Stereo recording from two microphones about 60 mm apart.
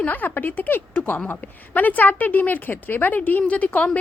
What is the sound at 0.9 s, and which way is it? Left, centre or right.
A woman's voice, left.